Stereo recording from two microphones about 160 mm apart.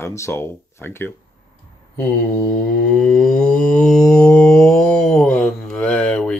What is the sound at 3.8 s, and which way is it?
Speech, 5° left (ahead or behind).